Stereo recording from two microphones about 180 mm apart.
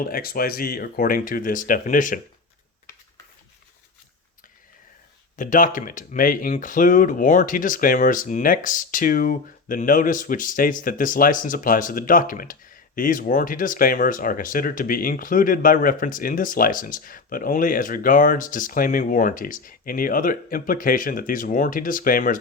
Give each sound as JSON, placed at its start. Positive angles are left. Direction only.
{"t": 0.0, "sound": "speech", "side_deg": 55}
{"t": 5.4, "sound": "speech", "side_deg": 45}